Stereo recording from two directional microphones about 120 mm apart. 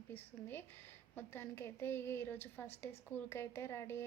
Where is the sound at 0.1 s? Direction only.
15° left (ahead or behind).